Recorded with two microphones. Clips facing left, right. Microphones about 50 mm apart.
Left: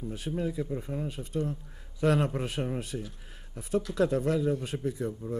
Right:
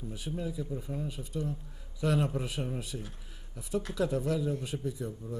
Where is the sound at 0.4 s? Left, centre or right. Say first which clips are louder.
Left 5 dB; left.